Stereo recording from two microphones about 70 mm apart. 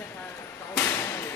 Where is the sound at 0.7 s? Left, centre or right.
Left.